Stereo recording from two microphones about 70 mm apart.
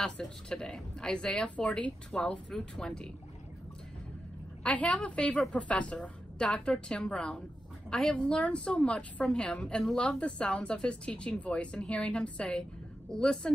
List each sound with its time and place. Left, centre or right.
0.0 s speech: centre
4.6 s a woman's voice: centre
10.2 s speech: centre